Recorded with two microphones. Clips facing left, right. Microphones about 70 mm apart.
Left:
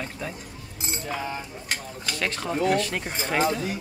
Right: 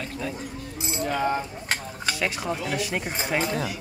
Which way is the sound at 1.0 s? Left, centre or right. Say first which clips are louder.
Right 8 dB; right.